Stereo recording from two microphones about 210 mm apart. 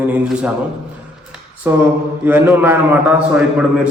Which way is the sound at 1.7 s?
10° right (ahead or behind).